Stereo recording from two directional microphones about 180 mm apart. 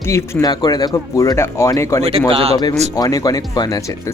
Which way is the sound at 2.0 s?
35° right (ahead or behind).